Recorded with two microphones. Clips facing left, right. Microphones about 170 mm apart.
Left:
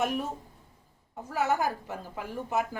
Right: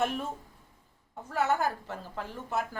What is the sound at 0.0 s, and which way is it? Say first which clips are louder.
Speech: left 1 dB; 10° left (ahead or behind).